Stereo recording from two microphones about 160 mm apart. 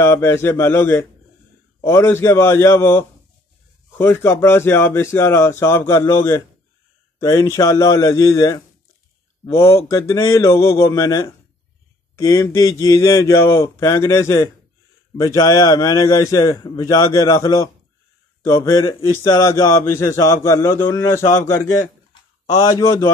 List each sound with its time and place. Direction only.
0.0 s a man's voice: 15° left (ahead or behind)